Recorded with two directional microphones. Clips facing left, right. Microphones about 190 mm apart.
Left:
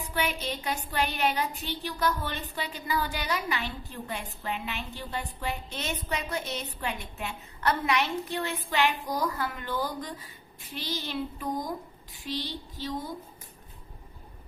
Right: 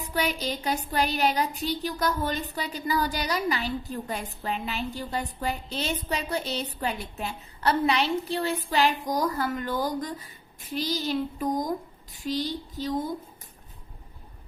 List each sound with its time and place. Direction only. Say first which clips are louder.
0.0 s a woman's voice: right 3 dB; 40° right (ahead or behind)